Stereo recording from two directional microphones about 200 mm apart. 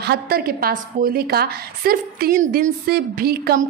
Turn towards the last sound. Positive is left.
turn(degrees=-45)  # may be behind; listen again after turning